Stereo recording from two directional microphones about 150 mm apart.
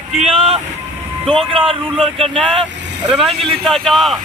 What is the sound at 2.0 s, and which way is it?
Speech, 40° right (ahead or behind).